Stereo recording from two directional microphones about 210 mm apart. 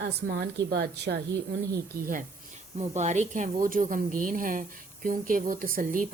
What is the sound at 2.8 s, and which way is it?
Speech, 35° right (ahead or behind).